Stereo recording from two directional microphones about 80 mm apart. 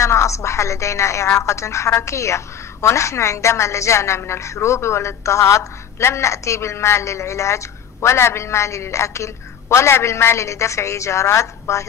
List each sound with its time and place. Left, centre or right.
0.0 s a woman's voice: left